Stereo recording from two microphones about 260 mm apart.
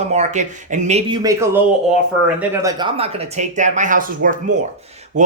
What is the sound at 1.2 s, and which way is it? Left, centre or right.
Speech, centre.